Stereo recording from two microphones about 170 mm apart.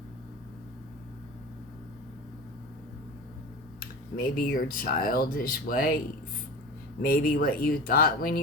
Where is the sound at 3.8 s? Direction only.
55° left (ahead or behind).